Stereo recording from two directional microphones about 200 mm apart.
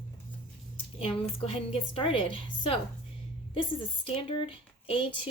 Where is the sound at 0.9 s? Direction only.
30° left (ahead or behind).